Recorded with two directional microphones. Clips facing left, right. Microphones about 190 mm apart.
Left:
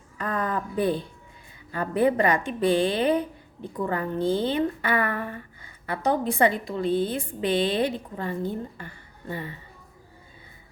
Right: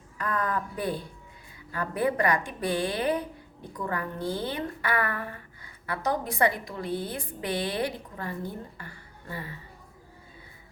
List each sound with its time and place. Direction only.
0.2 s a woman's voice: 25° left (ahead or behind)